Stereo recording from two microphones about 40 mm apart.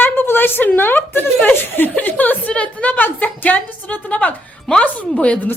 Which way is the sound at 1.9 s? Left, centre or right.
Left.